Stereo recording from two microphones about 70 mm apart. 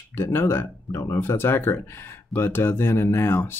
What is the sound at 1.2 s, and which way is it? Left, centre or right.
Speech, left.